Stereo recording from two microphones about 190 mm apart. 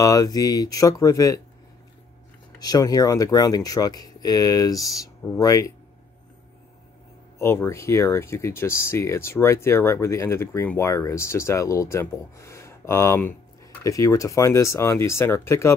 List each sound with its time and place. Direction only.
0.0 s speech: 20° left (ahead or behind)
2.6 s speech: 20° left (ahead or behind)
7.3 s speech: 15° left (ahead or behind)